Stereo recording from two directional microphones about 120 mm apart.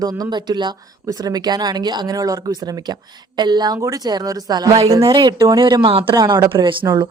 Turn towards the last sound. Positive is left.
turn(degrees=-45)  # may be behind; listen again after turning